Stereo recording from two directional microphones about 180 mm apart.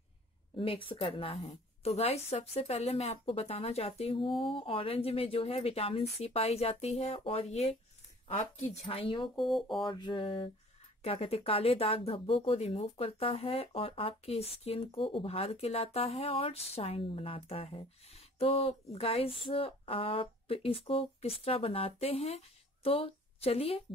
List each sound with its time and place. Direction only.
0.6 s speech: 30° left (ahead or behind)
9.4 s speech: centre (ahead or behind)
9.8 s a sound: 25° left (ahead or behind)
11.0 s a woman's voice: 35° left (ahead or behind)